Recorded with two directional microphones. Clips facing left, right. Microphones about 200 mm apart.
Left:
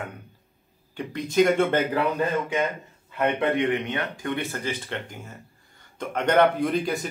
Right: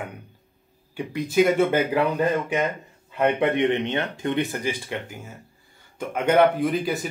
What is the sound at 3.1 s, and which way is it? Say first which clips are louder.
Speech: right 2 dB; 20° right (ahead or behind).